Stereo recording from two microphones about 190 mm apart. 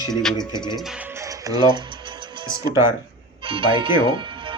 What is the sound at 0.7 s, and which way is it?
Music, centre (ahead or behind).